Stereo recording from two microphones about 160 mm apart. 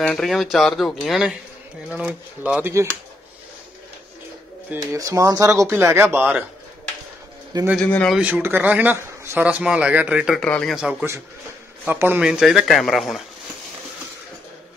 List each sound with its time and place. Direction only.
0.0 s a man's voice: 5° left (ahead or behind); by 2.9 s 15° right (ahead or behind)
4.6 s a man's voice: 20° right (ahead or behind)
7.7 s a man's voice: 10° left (ahead or behind)
8.2 s a man's voice: 10° right (ahead or behind)
10.4 s speech: 5° left (ahead or behind)